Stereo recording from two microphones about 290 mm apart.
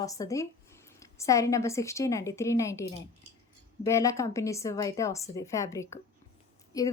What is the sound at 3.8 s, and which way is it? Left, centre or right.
A woman's voice, centre.